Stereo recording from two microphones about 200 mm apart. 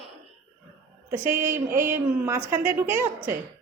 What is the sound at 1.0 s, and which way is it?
A woman's voice, 10° right (ahead or behind).